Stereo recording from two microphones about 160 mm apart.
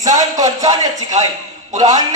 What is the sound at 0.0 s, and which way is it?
A man's voice, 20° right (ahead or behind).